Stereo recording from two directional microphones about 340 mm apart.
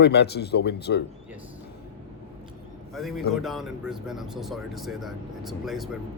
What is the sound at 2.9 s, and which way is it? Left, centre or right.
A man's voice, centre.